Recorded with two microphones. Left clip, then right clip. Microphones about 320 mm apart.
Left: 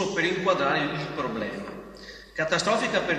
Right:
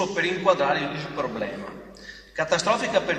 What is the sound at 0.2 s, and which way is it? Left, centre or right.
Speech, centre.